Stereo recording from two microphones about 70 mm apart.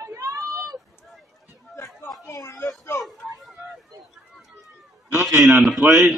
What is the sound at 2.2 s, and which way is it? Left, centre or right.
Speech, left.